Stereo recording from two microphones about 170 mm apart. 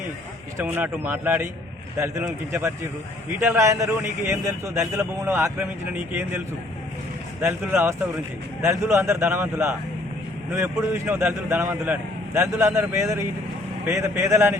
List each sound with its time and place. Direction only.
0.5 s a man's voice: 10° right (ahead or behind)
7.4 s a man's voice: 15° right (ahead or behind)